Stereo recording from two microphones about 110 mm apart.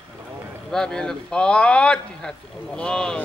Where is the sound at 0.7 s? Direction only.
5° left (ahead or behind).